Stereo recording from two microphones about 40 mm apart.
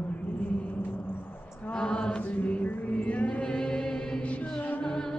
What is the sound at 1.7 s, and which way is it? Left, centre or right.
Chant, left.